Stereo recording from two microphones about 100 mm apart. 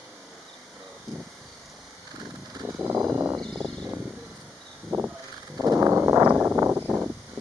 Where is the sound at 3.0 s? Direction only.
10° right (ahead or behind).